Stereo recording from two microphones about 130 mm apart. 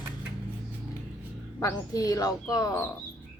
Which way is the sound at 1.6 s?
25° left (ahead or behind).